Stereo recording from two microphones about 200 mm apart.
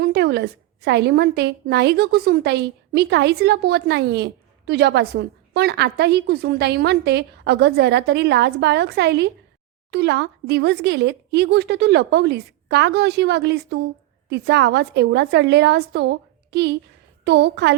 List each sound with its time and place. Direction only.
0.0 s a woman's voice: 55° right (ahead or behind)